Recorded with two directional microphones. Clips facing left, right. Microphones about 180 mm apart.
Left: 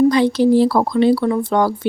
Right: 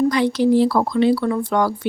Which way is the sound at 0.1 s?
30° left (ahead or behind).